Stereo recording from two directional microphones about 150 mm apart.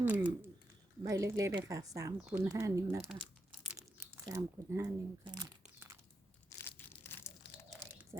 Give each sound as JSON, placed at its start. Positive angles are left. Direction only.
{"t": 0.0, "sound": "speech", "side_deg": -10}
{"t": 1.0, "sound": "a woman's voice", "side_deg": -20}
{"t": 2.2, "sound": "speech", "side_deg": -10}
{"t": 2.5, "sound": "a woman's voice", "side_deg": -20}
{"t": 3.0, "sound": "crumpling", "side_deg": 0}
{"t": 3.8, "sound": "speech", "side_deg": -20}
{"t": 6.6, "sound": "crushing", "side_deg": 15}
{"t": 8.1, "sound": "a woman's voice", "side_deg": -25}